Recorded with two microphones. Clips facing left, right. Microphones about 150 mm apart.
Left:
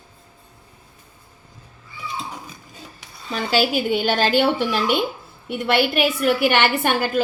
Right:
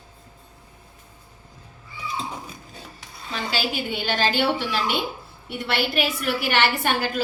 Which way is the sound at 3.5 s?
45° left (ahead or behind).